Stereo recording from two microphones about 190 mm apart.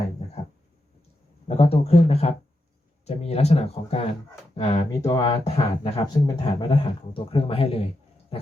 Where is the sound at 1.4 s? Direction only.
30° left (ahead or behind).